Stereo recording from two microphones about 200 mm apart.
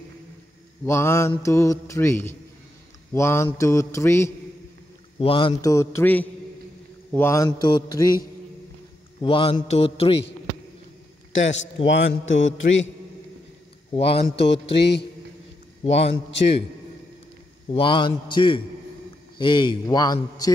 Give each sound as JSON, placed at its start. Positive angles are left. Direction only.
{"t": 0.8, "sound": "a man's voice", "side_deg": 15}
{"t": 3.1, "sound": "mantra", "side_deg": 10}
{"t": 3.4, "sound": "a man's voice", "side_deg": 15}
{"t": 5.2, "sound": "a man's voice", "side_deg": 25}
{"t": 9.2, "sound": "a man's voice", "side_deg": 25}
{"t": 11.3, "sound": "a man's voice", "side_deg": 70}
{"t": 13.9, "sound": "a man's voice", "side_deg": 30}
{"t": 14.3, "sound": "speech", "side_deg": 60}
{"t": 15.8, "sound": "a man's voice", "side_deg": 30}
{"t": 16.3, "sound": "speech", "side_deg": 60}
{"t": 17.6, "sound": "a man's voice", "side_deg": 25}